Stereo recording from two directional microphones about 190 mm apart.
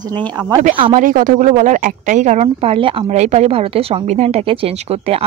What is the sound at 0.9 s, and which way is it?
A woman's voice, 45° right (ahead or behind).